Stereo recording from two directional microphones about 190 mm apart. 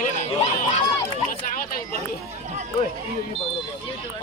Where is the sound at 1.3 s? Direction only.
50° left (ahead or behind).